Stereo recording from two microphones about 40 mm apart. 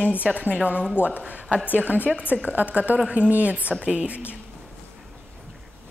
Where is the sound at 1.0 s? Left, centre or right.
Left.